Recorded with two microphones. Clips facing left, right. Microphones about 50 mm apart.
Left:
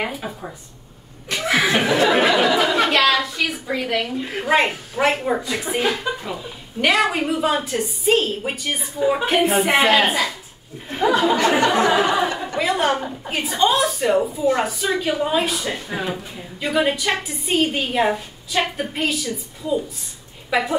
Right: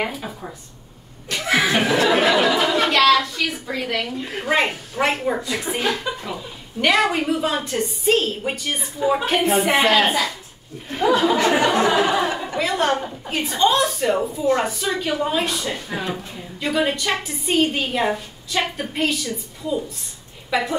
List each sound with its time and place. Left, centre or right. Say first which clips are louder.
0.0 s a woman's voice: even; centre
1.3 s laughter: even; centre
2.0 s a woman's voice: left 1 dB; centre
10.9 s speech: even; centre
11.8 s a woman's voice: left 1 dB; centre